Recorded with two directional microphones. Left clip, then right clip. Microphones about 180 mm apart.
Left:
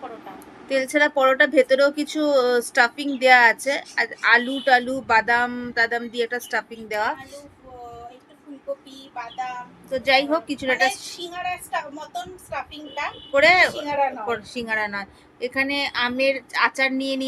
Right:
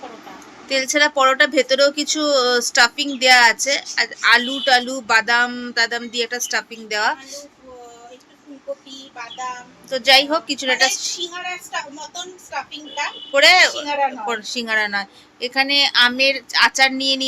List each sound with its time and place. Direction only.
0.7 s speech: 10° left (ahead or behind)
9.9 s speech: 10° left (ahead or behind)
13.3 s speech: 15° left (ahead or behind)
13.8 s speech: centre (ahead or behind)
14.3 s speech: 10° left (ahead or behind)